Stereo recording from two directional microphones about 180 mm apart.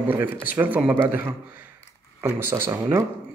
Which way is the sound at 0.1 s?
10° right (ahead or behind).